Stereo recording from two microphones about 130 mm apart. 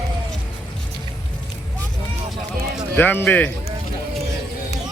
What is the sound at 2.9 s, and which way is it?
Speech, 15° left (ahead or behind).